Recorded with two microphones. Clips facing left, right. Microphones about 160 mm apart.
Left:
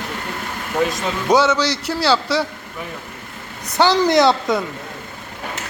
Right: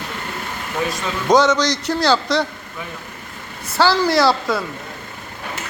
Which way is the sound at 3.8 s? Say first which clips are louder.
Left 2 dB; 20° left (ahead or behind).